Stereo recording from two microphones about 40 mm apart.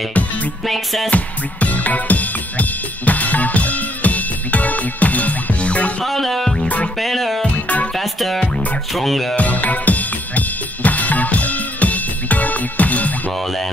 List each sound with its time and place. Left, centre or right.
0.7 s music: centre
1.1 s music: left
6.0 s music: centre
7.5 s music: left
7.9 s music: centre
9.3 s drum kit: left